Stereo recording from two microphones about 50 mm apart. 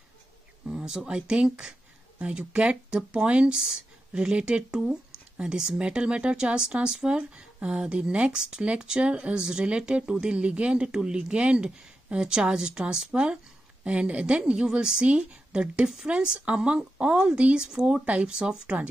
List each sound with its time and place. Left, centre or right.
0.7 s speech: centre